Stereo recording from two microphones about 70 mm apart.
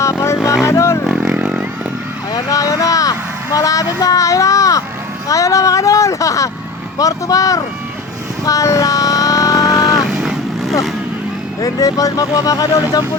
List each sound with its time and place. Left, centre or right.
0.0 s music: left
1.0 s vehicle: centre
1.4 s vehicle: centre
2.3 s a sound: left
5.3 s speech: left
8.4 s a sound: left
10.1 s boat: centre
11.6 s speech: left